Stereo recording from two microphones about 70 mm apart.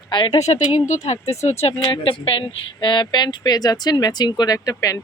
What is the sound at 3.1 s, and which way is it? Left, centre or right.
Speech, left.